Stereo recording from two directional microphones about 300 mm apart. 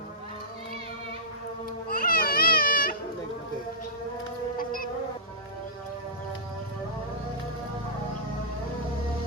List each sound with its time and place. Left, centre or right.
1.9 s children playing: left
4.5 s insect: left